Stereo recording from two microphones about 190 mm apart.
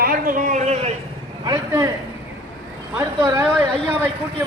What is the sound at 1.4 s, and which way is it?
Speech, 20° right (ahead or behind).